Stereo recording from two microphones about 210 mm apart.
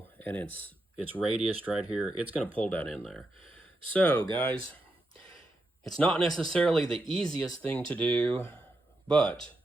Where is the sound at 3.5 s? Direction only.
5° left (ahead or behind).